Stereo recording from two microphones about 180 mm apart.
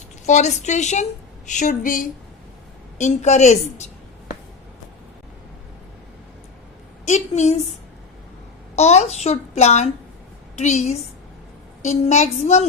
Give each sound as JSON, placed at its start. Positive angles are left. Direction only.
{"t": 0.3, "sound": "a child's voice", "side_deg": 40}
{"t": 7.0, "sound": "a woman's voice", "side_deg": 40}
{"t": 8.7, "sound": "a child's voice", "side_deg": 35}